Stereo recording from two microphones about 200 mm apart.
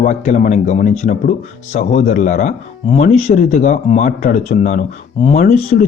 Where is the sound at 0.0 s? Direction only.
35° left (ahead or behind).